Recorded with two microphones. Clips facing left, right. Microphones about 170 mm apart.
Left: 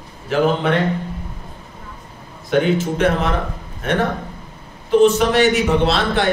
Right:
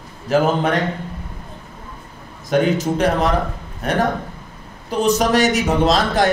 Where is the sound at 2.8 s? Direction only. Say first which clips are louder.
Right 1 dB; 35° right (ahead or behind).